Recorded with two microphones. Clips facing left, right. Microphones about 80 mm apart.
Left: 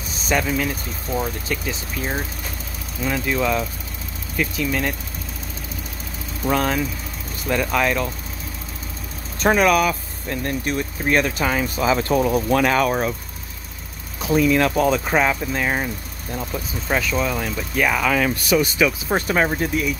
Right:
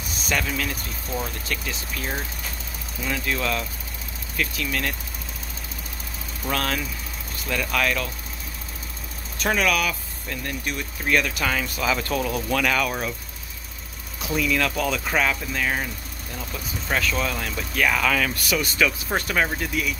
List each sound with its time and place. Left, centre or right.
0.3 s speech: centre
6.4 s speech: centre
9.4 s speech: left
14.2 s speech: left
16.9 s speech: centre